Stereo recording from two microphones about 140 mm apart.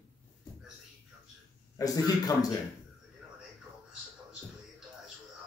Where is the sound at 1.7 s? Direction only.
25° left (ahead or behind).